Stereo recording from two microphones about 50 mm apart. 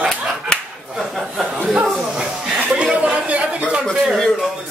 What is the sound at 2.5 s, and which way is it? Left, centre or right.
Chuckle, right.